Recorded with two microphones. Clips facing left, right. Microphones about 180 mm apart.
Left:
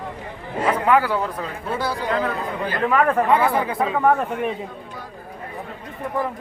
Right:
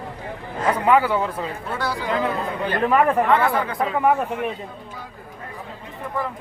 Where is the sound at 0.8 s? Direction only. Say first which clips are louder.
Right 2 dB; centre (ahead or behind).